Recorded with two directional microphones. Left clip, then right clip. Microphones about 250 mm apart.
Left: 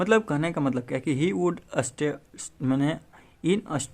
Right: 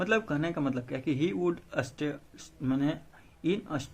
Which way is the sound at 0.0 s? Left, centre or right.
Left.